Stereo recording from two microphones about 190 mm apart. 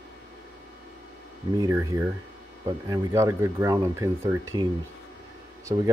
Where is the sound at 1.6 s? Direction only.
20° right (ahead or behind).